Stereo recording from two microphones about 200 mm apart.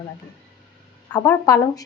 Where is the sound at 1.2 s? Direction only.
15° left (ahead or behind).